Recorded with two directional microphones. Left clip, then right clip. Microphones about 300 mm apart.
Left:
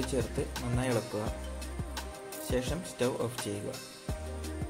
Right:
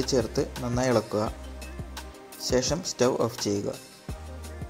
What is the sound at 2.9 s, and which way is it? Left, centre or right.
Speech, right.